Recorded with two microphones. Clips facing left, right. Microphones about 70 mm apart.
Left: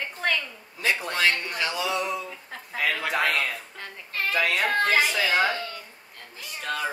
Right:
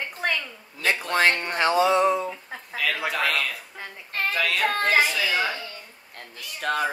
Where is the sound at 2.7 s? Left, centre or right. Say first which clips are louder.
Left 1 dB; left.